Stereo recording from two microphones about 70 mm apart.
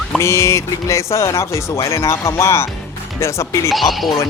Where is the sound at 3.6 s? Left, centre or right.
Centre.